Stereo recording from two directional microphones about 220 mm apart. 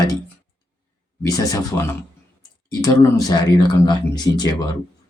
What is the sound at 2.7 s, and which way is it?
Speech, 15° left (ahead or behind).